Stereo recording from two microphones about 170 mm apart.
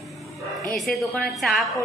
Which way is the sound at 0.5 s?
Centre (ahead or behind).